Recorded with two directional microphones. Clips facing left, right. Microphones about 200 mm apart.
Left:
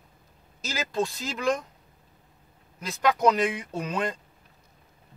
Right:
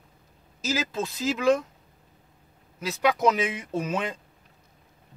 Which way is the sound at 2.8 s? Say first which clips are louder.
Even; 5° right (ahead or behind).